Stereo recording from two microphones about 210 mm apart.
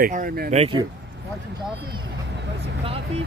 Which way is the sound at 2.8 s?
25° right (ahead or behind).